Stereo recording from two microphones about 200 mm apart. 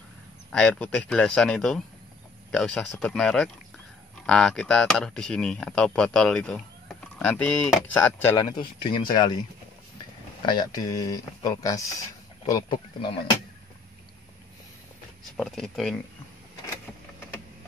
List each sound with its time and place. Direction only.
0.5 s speech: 5° left (ahead or behind); by 9.4 s 20° left (ahead or behind)
10.4 s speech: 20° left (ahead or behind)
15.3 s speech: centre (ahead or behind)